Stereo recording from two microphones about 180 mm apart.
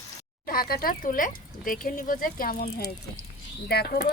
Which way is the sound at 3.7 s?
60° left (ahead or behind).